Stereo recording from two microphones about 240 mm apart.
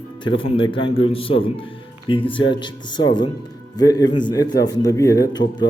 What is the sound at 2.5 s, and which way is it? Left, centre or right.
A man's voice, centre.